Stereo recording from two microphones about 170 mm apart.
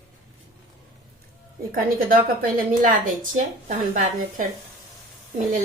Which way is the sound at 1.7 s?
55° right (ahead or behind).